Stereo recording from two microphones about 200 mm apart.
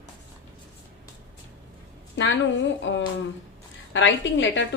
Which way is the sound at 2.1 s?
70° left (ahead or behind).